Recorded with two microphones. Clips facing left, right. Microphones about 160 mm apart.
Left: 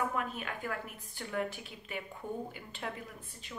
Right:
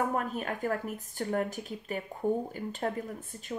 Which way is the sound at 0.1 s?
40° right (ahead or behind).